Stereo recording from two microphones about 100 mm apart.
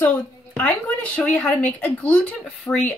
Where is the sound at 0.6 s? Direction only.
15° left (ahead or behind).